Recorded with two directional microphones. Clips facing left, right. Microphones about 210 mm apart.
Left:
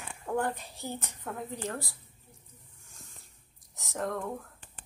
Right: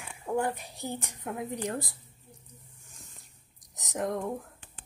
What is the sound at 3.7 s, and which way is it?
Speech, 20° right (ahead or behind).